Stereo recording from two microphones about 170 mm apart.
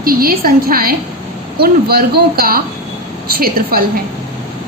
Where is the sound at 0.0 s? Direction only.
60° right (ahead or behind).